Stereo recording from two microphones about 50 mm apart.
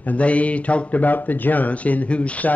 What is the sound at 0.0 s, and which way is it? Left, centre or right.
Speech, left.